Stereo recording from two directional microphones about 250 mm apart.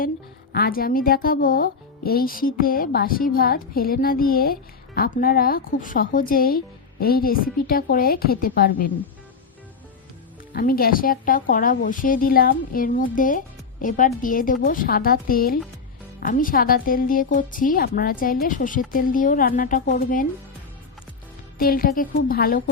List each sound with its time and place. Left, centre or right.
0.5 s speech: left
10.5 s speech: left
21.6 s speech: left